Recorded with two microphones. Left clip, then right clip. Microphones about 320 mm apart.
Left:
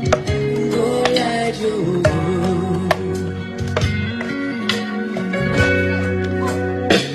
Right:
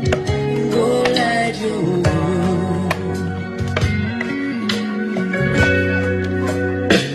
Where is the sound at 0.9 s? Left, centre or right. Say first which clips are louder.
Even; centre.